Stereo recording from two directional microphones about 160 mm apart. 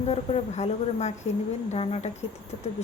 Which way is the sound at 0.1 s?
40° left (ahead or behind).